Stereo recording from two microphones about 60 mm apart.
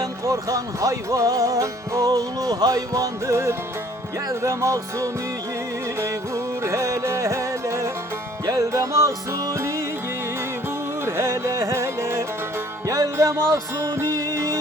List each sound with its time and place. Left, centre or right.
0.0 s music: right
4.4 s music: right
8.4 s music: right
11.0 s music: right
12.9 s music: right